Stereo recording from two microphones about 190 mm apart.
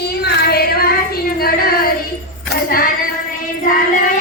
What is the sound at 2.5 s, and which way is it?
Music, 50° left (ahead or behind).